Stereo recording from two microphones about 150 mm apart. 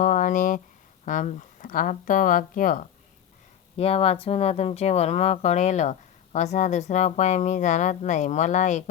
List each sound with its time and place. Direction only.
0.0 s speech: 60° left (ahead or behind)
3.8 s speech: 40° left (ahead or behind)